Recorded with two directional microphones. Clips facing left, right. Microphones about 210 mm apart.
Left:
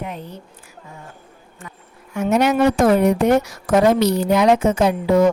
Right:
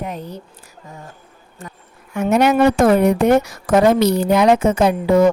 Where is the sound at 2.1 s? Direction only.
60° right (ahead or behind).